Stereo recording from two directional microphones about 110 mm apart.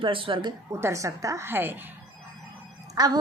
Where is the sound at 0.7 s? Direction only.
25° right (ahead or behind).